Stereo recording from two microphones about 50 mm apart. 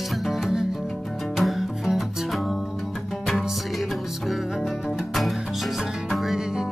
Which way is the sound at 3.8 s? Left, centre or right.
Centre.